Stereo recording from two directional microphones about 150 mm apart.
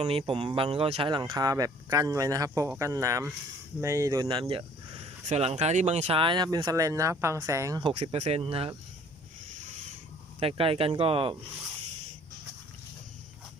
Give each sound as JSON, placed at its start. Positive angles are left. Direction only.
{"t": 0.0, "sound": "speech", "side_deg": -40}
{"t": 5.2, "sound": "speech", "side_deg": -45}
{"t": 7.8, "sound": "speech", "side_deg": -40}
{"t": 10.4, "sound": "speech", "side_deg": -40}